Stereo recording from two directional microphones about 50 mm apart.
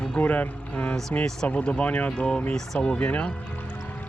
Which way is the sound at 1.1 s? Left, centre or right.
Left.